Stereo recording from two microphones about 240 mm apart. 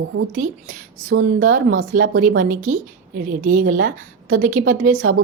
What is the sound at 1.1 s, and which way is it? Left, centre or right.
Speech, right.